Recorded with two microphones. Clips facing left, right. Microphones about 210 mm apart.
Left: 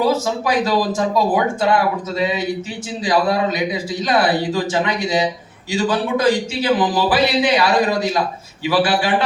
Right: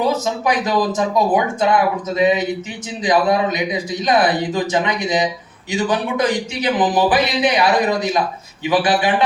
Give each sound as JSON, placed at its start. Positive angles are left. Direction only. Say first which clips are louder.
{"t": 0.0, "sound": "a man's voice", "louder": "left 1 dB", "side_deg": -20}